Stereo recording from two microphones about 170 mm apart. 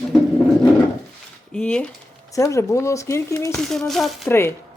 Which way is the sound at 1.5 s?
5° left (ahead or behind).